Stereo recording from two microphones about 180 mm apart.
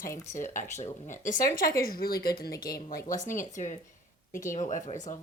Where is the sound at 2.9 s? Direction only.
45° left (ahead or behind).